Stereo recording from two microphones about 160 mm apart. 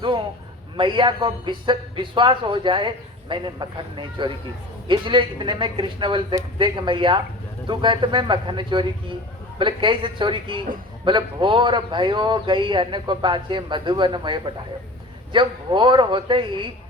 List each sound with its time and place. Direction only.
0.8 s a man's voice: 30° right (ahead or behind)